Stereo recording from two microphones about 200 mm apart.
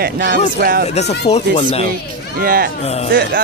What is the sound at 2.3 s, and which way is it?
Speech, 45° right (ahead or behind).